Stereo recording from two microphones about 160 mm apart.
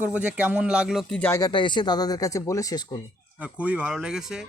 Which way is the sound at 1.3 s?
25° left (ahead or behind).